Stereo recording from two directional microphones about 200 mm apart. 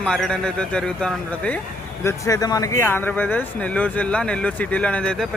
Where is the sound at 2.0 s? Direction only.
15° left (ahead or behind).